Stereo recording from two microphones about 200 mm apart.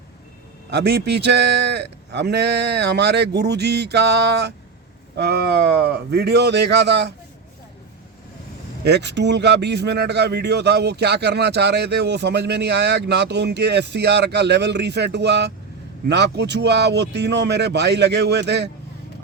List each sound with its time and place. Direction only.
0.7 s a man's voice: 55° right (ahead or behind)
8.8 s a man's voice: 60° right (ahead or behind)